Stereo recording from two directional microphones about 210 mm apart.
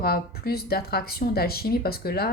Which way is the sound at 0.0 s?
45° left (ahead or behind).